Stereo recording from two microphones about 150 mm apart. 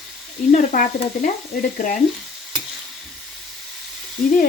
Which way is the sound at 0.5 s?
60° left (ahead or behind).